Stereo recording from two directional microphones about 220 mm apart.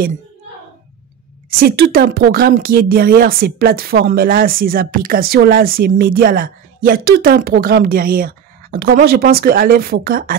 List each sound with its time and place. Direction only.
1.6 s speech: 40° right (ahead or behind)